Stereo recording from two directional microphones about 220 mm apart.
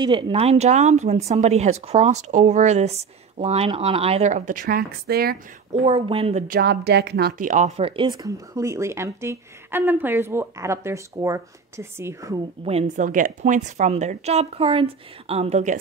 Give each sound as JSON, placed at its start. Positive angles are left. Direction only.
{"t": 0.0, "sound": "speech", "side_deg": -20}
{"t": 5.7, "sound": "speech", "side_deg": -25}
{"t": 6.4, "sound": "speech", "side_deg": -45}
{"t": 12.6, "sound": "a woman's voice", "side_deg": -30}